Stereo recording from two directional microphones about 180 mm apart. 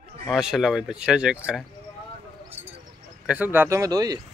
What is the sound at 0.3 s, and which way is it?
Speech, 5° right (ahead or behind).